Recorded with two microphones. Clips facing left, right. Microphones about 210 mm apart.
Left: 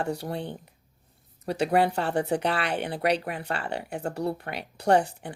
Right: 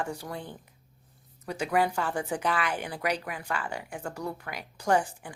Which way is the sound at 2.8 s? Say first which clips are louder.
Left 5 dB; 30° left (ahead or behind).